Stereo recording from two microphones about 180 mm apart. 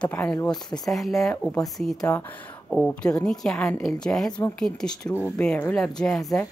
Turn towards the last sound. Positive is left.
turn(degrees=5)  # may be behind; listen again after turning